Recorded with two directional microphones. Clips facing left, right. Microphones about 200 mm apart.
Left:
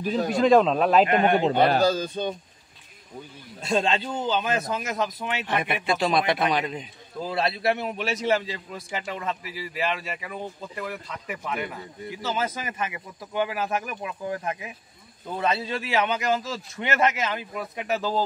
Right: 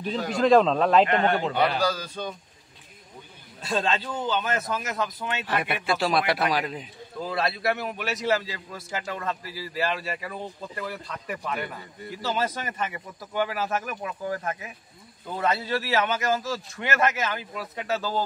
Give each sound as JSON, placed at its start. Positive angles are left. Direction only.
{"t": 0.4, "sound": "a man's voice", "side_deg": 0}
{"t": 3.6, "sound": "a man's voice", "side_deg": 20}
{"t": 5.9, "sound": "speech", "side_deg": 0}
{"t": 7.2, "sound": "a man's voice", "side_deg": 25}